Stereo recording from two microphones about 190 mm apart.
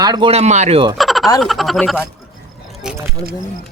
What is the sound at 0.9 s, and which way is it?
Frog, centre (ahead or behind).